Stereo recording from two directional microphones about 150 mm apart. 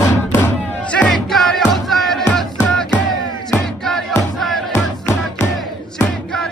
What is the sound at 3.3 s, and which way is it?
Music, 30° left (ahead or behind).